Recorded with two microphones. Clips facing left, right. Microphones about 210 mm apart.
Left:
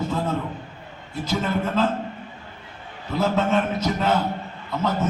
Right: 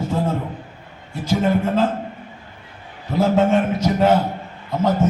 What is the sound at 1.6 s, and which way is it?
Speech, 50° right (ahead or behind).